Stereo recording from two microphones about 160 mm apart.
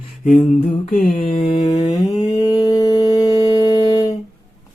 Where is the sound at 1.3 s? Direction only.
35° left (ahead or behind).